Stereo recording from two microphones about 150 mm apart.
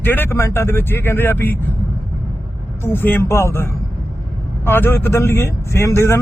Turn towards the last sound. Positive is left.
turn(degrees=15)  # may be behind; listen again after turning